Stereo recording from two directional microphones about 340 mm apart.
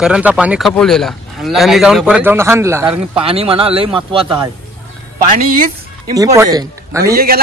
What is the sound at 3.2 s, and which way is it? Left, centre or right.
Speech, centre.